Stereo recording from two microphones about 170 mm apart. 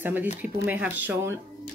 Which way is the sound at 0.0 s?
10° right (ahead or behind).